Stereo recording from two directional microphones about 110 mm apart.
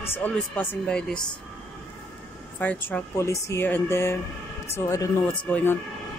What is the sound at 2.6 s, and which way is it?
Speech, 15° left (ahead or behind).